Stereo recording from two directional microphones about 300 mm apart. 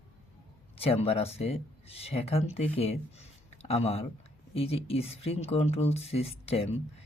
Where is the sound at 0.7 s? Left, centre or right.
Centre.